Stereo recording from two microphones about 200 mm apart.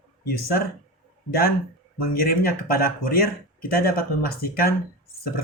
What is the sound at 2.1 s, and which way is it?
Speech, 45° left (ahead or behind).